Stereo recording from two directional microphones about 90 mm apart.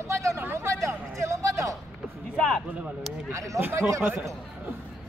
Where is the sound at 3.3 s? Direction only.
35° right (ahead or behind).